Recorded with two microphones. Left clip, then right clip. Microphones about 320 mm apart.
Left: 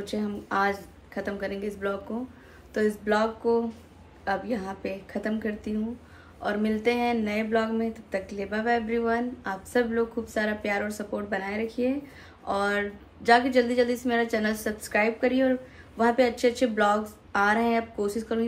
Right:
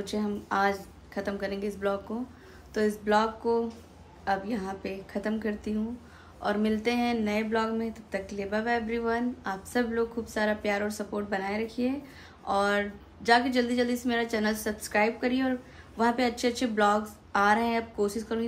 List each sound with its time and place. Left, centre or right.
0.0 s speech: centre